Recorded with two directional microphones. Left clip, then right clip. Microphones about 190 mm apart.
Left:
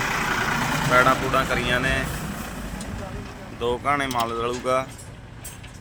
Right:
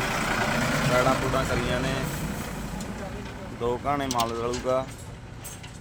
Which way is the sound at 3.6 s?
5° right (ahead or behind).